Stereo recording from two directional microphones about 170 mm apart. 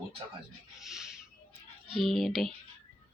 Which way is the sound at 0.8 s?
Centre (ahead or behind).